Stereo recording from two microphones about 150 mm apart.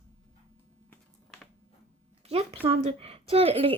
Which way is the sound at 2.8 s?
40° right (ahead or behind).